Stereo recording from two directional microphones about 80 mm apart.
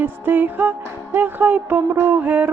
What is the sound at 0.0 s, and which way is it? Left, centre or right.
Music, right.